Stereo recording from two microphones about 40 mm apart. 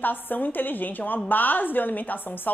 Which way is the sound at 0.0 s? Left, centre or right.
Left.